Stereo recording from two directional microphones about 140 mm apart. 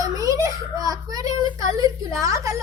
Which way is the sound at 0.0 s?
25° right (ahead or behind).